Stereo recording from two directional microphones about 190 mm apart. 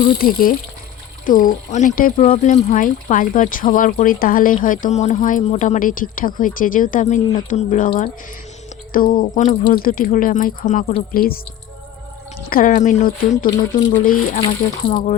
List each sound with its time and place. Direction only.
0.2 s speech: 50° left (ahead or behind)
8.9 s speech: 50° left (ahead or behind)
12.5 s speech: 45° left (ahead or behind)
14.4 s speech: 25° left (ahead or behind)